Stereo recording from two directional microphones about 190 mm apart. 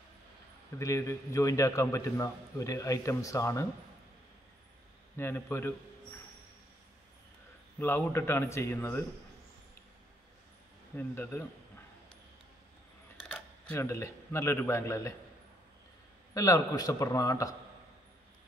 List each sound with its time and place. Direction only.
0.7 s a man's voice: 15° left (ahead or behind)
5.1 s a man's voice: 10° left (ahead or behind)
7.8 s a man's voice: 10° left (ahead or behind)
11.0 s a man's voice: 10° left (ahead or behind)
13.3 s speech: 10° left (ahead or behind)
16.3 s a man's voice: 20° left (ahead or behind)